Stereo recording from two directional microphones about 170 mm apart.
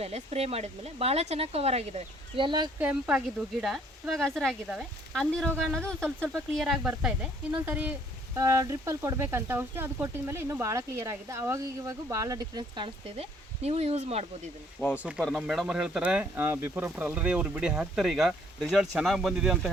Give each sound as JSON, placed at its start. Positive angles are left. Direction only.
{"t": 0.0, "sound": "speech", "side_deg": -35}
{"t": 2.8, "sound": "speech", "side_deg": -5}
{"t": 8.4, "sound": "speech", "side_deg": -20}
{"t": 14.8, "sound": "speech", "side_deg": -5}